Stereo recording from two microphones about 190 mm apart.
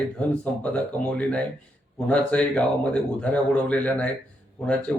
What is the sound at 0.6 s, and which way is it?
Speech, 5° left (ahead or behind).